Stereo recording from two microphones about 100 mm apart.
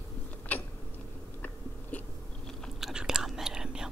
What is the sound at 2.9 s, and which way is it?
Whispering, 5° right (ahead or behind).